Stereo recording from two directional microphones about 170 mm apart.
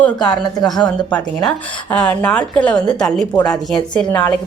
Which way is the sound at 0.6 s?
25° left (ahead or behind).